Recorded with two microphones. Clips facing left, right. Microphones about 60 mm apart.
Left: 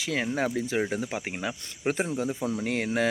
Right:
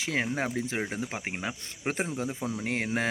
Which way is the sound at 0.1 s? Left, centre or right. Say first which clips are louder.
Left 2 dB; right.